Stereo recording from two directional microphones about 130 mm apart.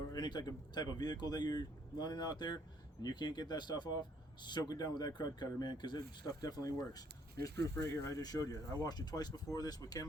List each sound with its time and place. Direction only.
0.1 s speech: 35° left (ahead or behind)
8.0 s speech: 25° left (ahead or behind)